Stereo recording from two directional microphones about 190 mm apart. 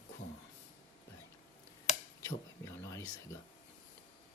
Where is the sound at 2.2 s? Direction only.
15° left (ahead or behind).